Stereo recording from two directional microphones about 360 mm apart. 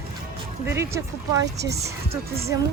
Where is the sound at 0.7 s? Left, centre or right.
Centre.